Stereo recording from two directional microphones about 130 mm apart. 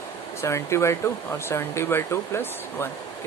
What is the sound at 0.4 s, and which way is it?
Speech, 20° left (ahead or behind).